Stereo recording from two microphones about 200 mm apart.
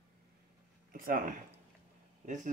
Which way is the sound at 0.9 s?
45° right (ahead or behind).